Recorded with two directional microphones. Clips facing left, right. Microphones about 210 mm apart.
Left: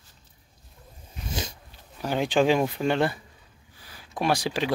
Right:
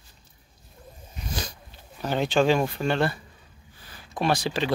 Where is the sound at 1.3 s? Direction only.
25° left (ahead or behind).